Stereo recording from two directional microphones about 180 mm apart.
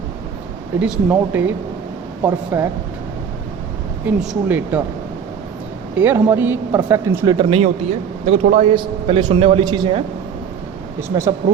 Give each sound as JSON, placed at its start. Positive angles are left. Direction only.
{"t": 0.8, "sound": "speech", "side_deg": -10}
{"t": 4.0, "sound": "speech", "side_deg": -10}
{"t": 6.0, "sound": "speech", "side_deg": -10}
{"t": 7.3, "sound": "a man's voice", "side_deg": -35}
{"t": 11.1, "sound": "a man's voice", "side_deg": -25}